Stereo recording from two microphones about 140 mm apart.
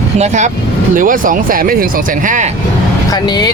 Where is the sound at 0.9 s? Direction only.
75° right (ahead or behind).